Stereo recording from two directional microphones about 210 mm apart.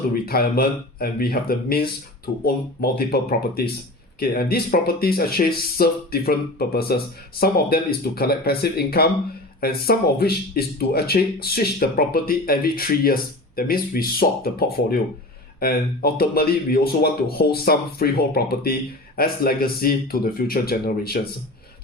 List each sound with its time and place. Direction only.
0.1 s a man's voice: 45° left (ahead or behind)